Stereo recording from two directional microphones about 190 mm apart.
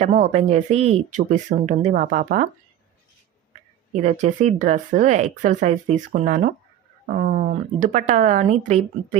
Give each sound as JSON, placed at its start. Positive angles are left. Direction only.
{"t": 0.0, "sound": "speech", "side_deg": -40}
{"t": 3.9, "sound": "speech", "side_deg": -40}